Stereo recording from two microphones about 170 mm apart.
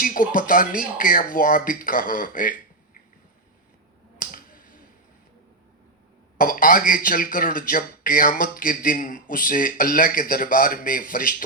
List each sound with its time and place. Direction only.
0.0 s speech: 55° left (ahead or behind)
4.2 s a sound: 55° left (ahead or behind)
6.3 s speech: 55° left (ahead or behind)